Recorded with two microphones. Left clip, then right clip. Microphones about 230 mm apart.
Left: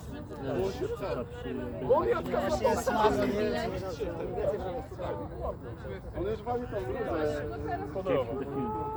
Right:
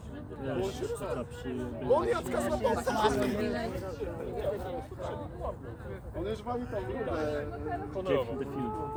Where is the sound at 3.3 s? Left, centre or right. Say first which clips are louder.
Left 3 dB; left.